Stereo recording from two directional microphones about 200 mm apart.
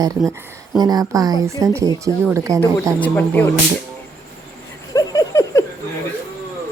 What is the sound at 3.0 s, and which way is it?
Speech, 10° left (ahead or behind).